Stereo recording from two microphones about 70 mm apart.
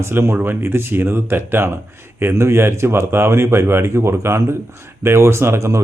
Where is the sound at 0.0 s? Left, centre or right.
Right.